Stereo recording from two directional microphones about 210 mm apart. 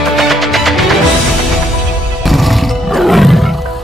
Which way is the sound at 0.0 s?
Centre (ahead or behind).